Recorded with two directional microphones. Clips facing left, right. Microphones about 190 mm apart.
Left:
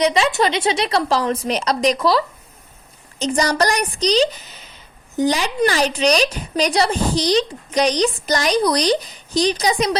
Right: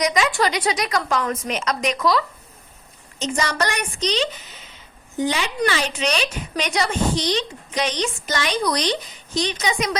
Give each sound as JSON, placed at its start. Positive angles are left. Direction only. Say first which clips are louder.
{"t": 0.0, "sound": "a woman's voice", "louder": "left 3 dB", "side_deg": 30}